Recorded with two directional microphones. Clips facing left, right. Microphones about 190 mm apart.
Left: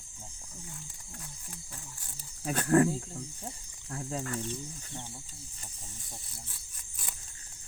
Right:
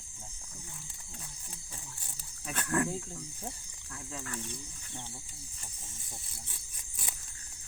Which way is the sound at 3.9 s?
35° left (ahead or behind).